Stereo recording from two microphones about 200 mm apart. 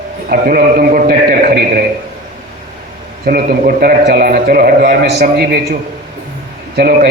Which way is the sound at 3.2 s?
45° right (ahead or behind).